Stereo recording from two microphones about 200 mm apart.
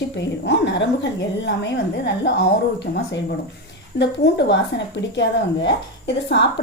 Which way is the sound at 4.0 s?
60° left (ahead or behind).